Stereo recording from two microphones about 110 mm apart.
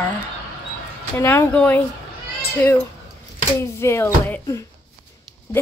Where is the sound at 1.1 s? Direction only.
20° left (ahead or behind).